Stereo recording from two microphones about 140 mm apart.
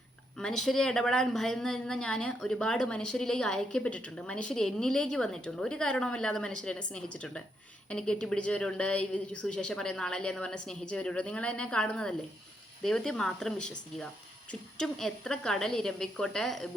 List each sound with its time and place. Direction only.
0.3 s a woman's voice: 5° left (ahead or behind)